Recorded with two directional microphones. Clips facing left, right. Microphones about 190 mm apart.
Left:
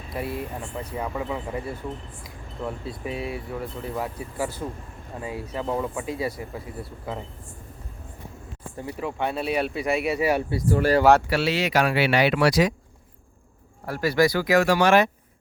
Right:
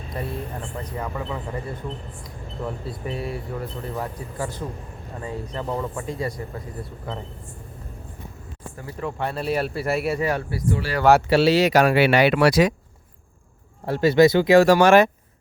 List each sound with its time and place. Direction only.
0.1 s speech: 5° left (ahead or behind)
2.6 s speech: centre (ahead or behind)
8.8 s speech: 15° left (ahead or behind)
9.0 s speech: 5° left (ahead or behind)
10.2 s speech: 15° left (ahead or behind)
11.3 s speech: 35° right (ahead or behind); by 12.7 s 60° right (ahead or behind)
13.8 s speech: 25° right (ahead or behind)
14.7 s speech: 45° right (ahead or behind)